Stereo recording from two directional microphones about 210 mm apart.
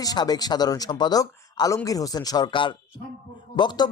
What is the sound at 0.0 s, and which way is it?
Music, 20° left (ahead or behind).